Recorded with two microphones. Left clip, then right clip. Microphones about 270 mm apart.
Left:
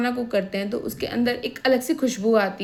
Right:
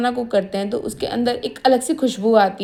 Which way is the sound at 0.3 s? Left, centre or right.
Centre.